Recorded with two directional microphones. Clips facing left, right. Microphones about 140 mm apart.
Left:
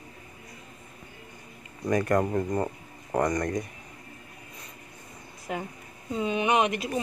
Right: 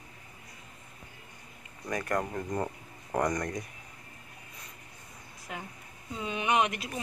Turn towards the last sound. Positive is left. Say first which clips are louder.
# left 3 dB
turn(degrees=5)  # may be behind; listen again after turning